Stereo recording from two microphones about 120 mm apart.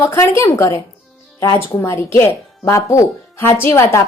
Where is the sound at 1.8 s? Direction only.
25° left (ahead or behind).